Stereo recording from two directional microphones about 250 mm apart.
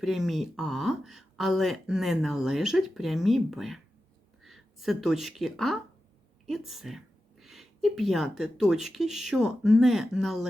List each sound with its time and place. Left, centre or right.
0.0 s speech: centre